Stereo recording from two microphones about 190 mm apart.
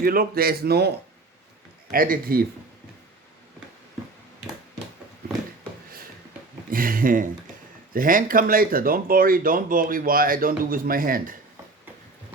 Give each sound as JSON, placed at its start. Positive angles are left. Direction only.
{"t": 0.0, "sound": "speech", "side_deg": -50}
{"t": 6.7, "sound": "speech", "side_deg": -50}